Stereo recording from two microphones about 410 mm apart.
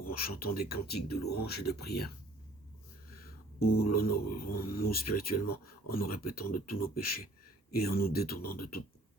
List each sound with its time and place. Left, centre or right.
0.0 s speech: left
3.2 s music: left
3.8 s speech: left